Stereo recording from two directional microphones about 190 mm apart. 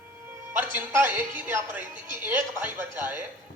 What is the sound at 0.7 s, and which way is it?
A man's voice, 10° right (ahead or behind).